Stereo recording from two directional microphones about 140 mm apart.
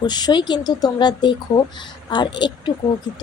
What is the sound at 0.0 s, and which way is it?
Speech, 30° left (ahead or behind).